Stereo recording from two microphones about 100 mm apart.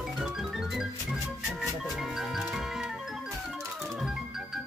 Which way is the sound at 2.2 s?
5° right (ahead or behind).